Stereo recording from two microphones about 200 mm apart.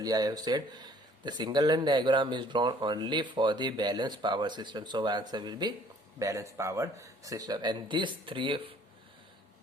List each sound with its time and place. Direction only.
0.0 s speech: 20° right (ahead or behind)